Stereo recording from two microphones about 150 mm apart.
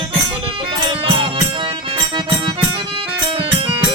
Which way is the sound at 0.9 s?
35° right (ahead or behind).